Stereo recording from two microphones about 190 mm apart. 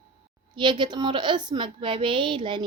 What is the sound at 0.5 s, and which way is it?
A woman's voice, 25° right (ahead or behind).